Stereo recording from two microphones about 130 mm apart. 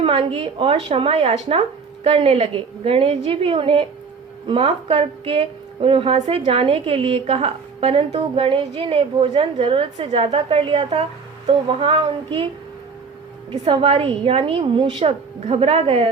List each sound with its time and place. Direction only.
0.0 s a woman's voice: 45° right (ahead or behind)
6.1 s a woman's voice: 55° right (ahead or behind); by 12.5 s 40° right (ahead or behind)
13.5 s a woman's voice: 45° right (ahead or behind)